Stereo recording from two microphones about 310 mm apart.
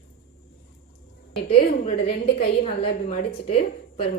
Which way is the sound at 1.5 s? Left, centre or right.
Left.